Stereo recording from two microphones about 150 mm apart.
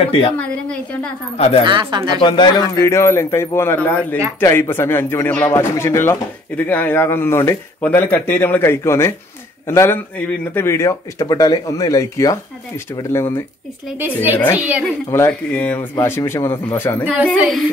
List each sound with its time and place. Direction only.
0.0 s speech: 40° left (ahead or behind)
0.4 s speech: 5° left (ahead or behind)
1.3 s speech: 40° left (ahead or behind)
1.6 s speech: 30° right (ahead or behind)
2.1 s speech: 30° left (ahead or behind)
2.7 s speech: 20° left (ahead or behind)
13.9 s a woman's voice: 15° right (ahead or behind)
14.3 s speech: 15° left (ahead or behind)
14.6 s a woman's voice: 10° right (ahead or behind)
15.0 s speech: 20° left (ahead or behind)
15.5 s speech: 10° left (ahead or behind)
17.4 s female singing: centre (ahead or behind)